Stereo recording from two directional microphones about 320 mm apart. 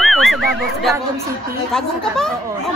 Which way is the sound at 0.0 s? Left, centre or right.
Centre.